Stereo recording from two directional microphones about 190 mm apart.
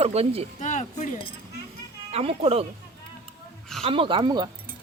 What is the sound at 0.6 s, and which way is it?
Speech, 40° left (ahead or behind).